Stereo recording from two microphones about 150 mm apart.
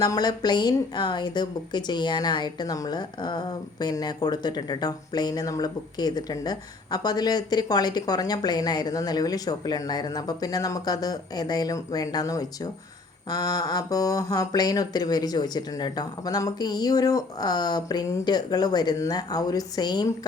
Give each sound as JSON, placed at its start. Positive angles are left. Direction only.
{"t": 0.0, "sound": "a woman's voice", "side_deg": 25}